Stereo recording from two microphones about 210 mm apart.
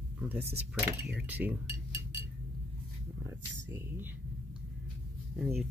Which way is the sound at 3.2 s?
10° right (ahead or behind).